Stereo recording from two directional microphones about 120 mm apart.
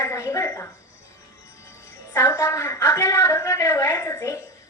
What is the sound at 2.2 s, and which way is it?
A woman's voice, 25° left (ahead or behind).